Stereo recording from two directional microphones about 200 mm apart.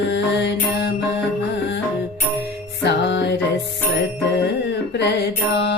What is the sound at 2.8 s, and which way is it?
Music, 60° left (ahead or behind).